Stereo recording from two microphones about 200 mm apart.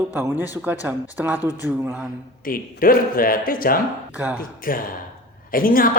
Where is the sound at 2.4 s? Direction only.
45° left (ahead or behind).